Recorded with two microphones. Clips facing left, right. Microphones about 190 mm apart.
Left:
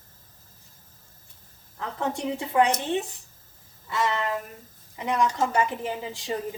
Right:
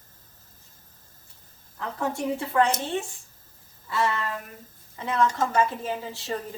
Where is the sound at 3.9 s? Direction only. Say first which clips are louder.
Even; 20° left (ahead or behind).